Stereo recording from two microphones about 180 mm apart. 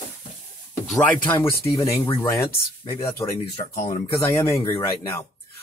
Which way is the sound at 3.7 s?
40° left (ahead or behind).